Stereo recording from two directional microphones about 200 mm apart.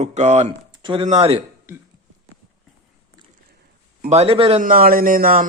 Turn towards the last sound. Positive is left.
turn(degrees=-45)  # may be behind; listen again after turning